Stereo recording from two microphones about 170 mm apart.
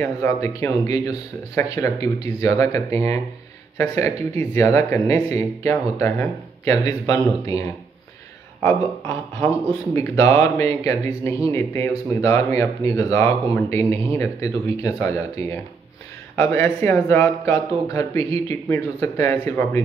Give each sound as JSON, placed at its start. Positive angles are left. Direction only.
{"t": 0.0, "sound": "speech", "side_deg": 15}
{"t": 8.6, "sound": "speech", "side_deg": 15}